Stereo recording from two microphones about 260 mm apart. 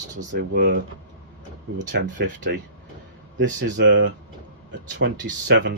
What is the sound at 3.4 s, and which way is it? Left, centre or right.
Speech, right.